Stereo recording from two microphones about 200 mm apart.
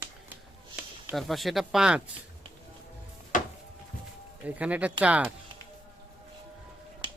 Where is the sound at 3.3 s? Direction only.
40° left (ahead or behind).